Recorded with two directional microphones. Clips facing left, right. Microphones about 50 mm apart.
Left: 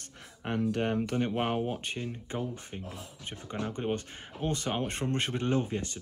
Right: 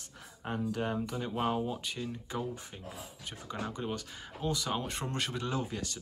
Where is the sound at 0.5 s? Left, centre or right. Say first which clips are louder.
Left 4 dB; left.